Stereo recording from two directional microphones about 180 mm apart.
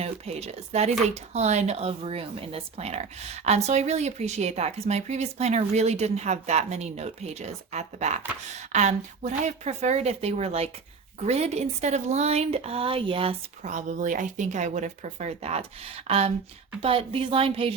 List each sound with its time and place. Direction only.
0.0 s speech: 35° right (ahead or behind)
13.6 s speech: 40° right (ahead or behind)